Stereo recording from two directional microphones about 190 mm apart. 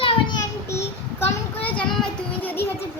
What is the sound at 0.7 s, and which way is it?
Child singing, 15° left (ahead or behind).